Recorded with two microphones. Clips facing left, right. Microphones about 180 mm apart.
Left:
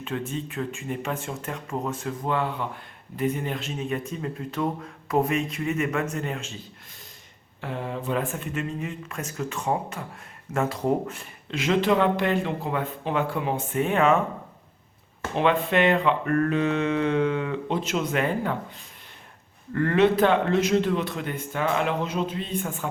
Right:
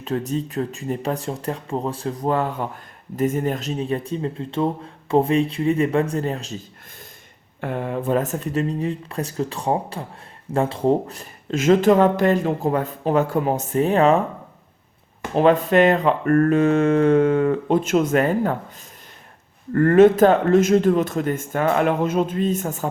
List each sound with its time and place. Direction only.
0.0 s speech: 40° right (ahead or behind)
7.6 s speech: 55° right (ahead or behind); by 14.2 s 35° right (ahead or behind)
15.4 s speech: 40° right (ahead or behind)
19.7 s speech: 45° right (ahead or behind)